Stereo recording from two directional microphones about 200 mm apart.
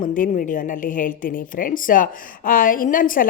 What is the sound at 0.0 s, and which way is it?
A woman's voice, 40° left (ahead or behind).